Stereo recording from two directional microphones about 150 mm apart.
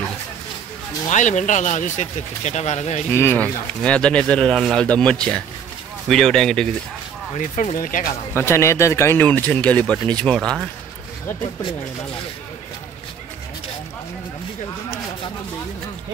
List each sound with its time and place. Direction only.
1.0 s speech: 55° left (ahead or behind)
3.1 s speech: 15° left (ahead or behind)
7.3 s speech: 60° left (ahead or behind)
8.4 s speech: 15° left (ahead or behind)